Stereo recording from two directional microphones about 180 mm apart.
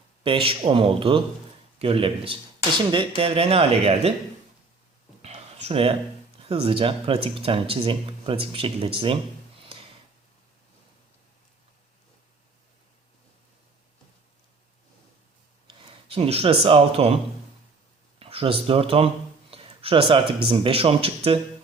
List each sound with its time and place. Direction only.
0.2 s a man's voice: 30° right (ahead or behind)
5.2 s a sound: 35° right (ahead or behind)
6.5 s speech: 30° right (ahead or behind)
15.6 s speech: 30° right (ahead or behind)
18.2 s speech: 30° right (ahead or behind)